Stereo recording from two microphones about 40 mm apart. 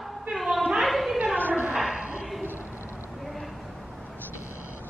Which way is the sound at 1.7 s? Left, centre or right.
Right.